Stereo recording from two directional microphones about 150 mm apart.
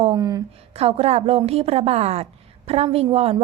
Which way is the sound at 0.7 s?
40° right (ahead or behind).